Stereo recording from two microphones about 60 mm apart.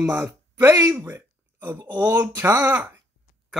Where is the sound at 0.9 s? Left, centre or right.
Right.